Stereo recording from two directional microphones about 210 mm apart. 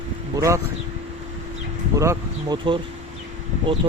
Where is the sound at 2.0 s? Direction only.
15° right (ahead or behind).